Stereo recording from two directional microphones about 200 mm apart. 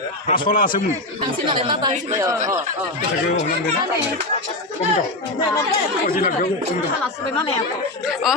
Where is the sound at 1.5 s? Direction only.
25° right (ahead or behind).